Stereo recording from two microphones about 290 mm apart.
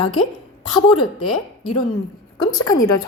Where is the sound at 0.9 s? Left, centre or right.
Left.